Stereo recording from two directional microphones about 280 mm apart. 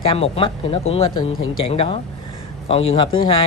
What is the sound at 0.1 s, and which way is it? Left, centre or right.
Speech, centre.